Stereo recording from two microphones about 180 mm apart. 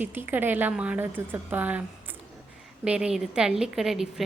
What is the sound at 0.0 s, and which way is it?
A woman's voice, 10° right (ahead or behind).